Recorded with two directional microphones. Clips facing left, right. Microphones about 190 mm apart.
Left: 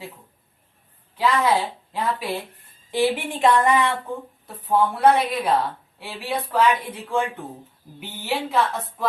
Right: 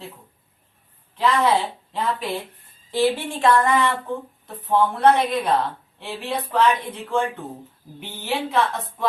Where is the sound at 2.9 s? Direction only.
15° left (ahead or behind).